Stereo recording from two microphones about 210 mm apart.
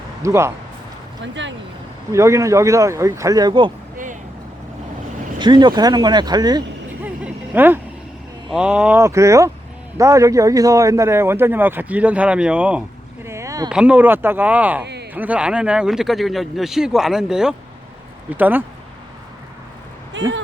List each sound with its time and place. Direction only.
0.2 s speech: 15° right (ahead or behind)
1.2 s speech: 60° right (ahead or behind)
2.1 s speech: 15° right (ahead or behind)
3.9 s a sound: 40° right (ahead or behind)
5.4 s speech: 20° right (ahead or behind)
7.0 s a sound: 10° right (ahead or behind)
8.4 s speech: 5° right (ahead or behind)
13.2 s a sound: 15° right (ahead or behind)
13.7 s speech: 5° right (ahead or behind)
20.1 s speech: 60° right (ahead or behind)